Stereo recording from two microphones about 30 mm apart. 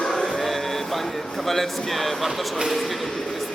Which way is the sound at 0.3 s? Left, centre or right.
Centre.